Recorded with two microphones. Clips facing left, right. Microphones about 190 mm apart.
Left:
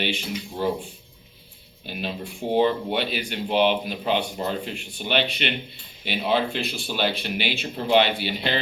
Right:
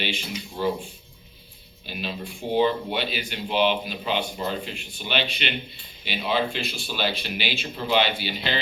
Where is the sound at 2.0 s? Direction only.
50° left (ahead or behind).